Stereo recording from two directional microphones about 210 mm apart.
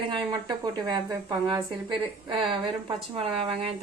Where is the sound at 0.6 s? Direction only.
20° right (ahead or behind).